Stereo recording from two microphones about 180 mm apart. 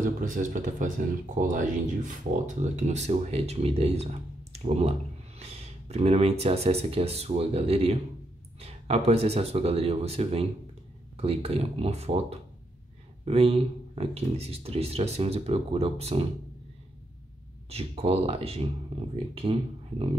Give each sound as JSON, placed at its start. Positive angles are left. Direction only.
{"t": 0.0, "sound": "speech", "side_deg": -45}
{"t": 17.6, "sound": "speech", "side_deg": -35}